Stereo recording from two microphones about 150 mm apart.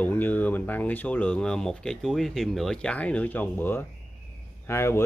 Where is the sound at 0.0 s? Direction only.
10° left (ahead or behind).